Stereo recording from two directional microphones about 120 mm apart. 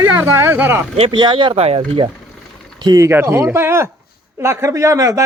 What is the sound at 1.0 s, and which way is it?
Speech, 40° right (ahead or behind).